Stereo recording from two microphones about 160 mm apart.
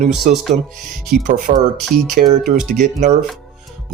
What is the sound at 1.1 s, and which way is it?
Speech, 50° right (ahead or behind).